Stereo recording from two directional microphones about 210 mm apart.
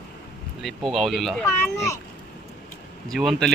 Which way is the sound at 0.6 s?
Centre (ahead or behind).